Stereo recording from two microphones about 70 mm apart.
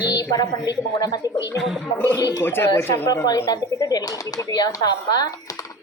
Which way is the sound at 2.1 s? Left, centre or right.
Left.